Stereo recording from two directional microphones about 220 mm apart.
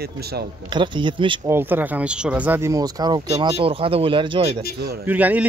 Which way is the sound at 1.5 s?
10° right (ahead or behind).